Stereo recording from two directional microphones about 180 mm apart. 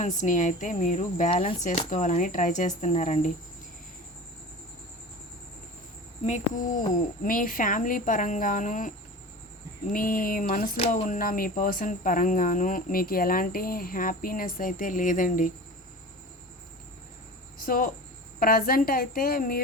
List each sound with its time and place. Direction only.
0.0 s speech: 45° left (ahead or behind)
6.2 s speech: 45° left (ahead or behind)
9.9 s speech: 50° left (ahead or behind)
10.8 s speech: 40° left (ahead or behind)
17.7 s a woman's voice: 55° left (ahead or behind)